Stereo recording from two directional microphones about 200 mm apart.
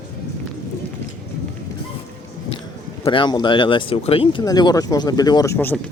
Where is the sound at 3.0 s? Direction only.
25° left (ahead or behind).